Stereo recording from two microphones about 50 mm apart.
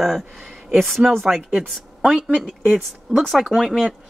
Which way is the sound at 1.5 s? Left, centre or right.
Right.